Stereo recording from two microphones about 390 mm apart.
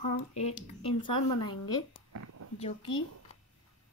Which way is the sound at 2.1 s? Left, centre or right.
Right.